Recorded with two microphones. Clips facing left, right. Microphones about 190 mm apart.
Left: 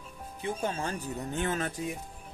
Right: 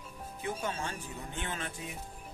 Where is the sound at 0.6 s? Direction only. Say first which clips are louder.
Left 4 dB; 35° left (ahead or behind).